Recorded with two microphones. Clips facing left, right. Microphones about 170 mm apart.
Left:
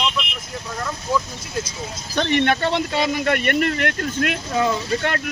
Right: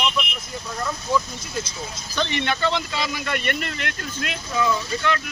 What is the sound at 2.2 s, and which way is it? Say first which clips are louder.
Speech: left 5 dB; 55° left (ahead or behind).